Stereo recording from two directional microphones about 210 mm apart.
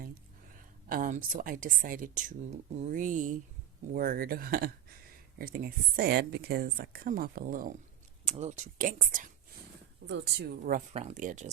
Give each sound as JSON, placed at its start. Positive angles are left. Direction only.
{"t": 0.9, "sound": "speech", "side_deg": -40}
{"t": 8.2, "sound": "speech", "side_deg": -30}
{"t": 10.1, "sound": "speech", "side_deg": -55}